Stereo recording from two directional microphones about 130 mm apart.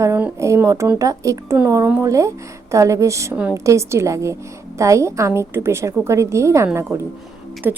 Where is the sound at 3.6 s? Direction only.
20° right (ahead or behind).